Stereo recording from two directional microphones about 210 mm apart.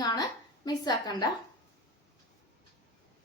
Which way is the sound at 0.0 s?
20° left (ahead or behind).